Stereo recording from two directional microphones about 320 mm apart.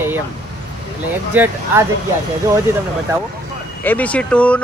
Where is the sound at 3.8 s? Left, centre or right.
Centre.